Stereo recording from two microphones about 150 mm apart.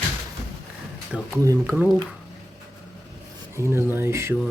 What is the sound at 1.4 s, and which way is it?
Speech, 15° right (ahead or behind).